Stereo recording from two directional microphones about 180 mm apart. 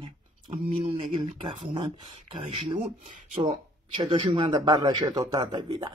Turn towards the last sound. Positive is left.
turn(degrees=-25)  # may be behind; listen again after turning